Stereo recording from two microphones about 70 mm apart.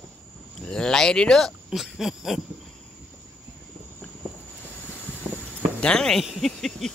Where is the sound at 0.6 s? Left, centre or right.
Centre.